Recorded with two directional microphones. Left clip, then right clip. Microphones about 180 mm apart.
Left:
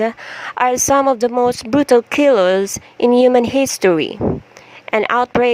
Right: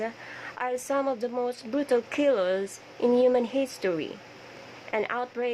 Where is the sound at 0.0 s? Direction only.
40° left (ahead or behind).